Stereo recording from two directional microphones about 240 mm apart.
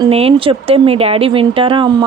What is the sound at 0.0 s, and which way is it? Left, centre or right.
Speech, right.